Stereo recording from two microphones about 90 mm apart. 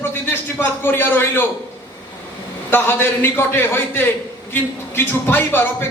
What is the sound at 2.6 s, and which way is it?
Speech, 25° left (ahead or behind).